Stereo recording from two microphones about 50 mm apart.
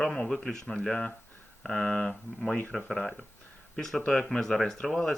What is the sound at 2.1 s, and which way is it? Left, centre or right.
Speech, centre.